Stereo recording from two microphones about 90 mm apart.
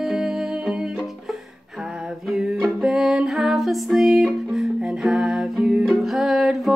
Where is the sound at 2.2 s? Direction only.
5° right (ahead or behind).